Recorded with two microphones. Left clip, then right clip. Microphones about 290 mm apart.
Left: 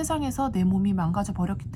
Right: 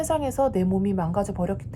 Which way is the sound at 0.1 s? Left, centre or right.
Centre.